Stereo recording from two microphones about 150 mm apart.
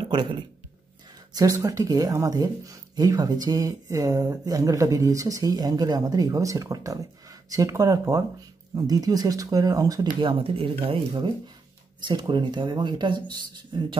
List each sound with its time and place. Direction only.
0.1 s speech: 30° right (ahead or behind)